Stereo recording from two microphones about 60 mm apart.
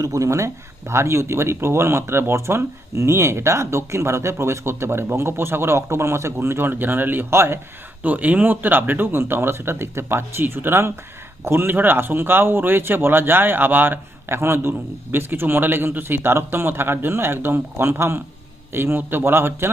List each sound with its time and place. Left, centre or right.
0.0 s speech: right
8.0 s a man's voice: right